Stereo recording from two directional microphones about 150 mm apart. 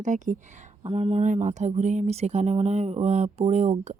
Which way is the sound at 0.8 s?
40° right (ahead or behind).